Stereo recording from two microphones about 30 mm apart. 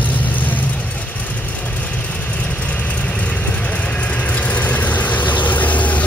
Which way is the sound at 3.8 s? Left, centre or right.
Left.